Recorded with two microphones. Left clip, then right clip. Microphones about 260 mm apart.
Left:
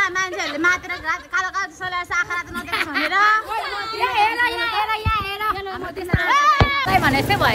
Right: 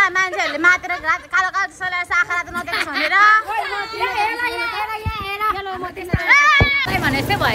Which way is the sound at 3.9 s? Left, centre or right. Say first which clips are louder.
Left 2 dB; centre.